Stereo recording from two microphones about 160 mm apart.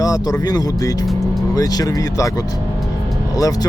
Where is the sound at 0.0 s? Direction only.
20° left (ahead or behind).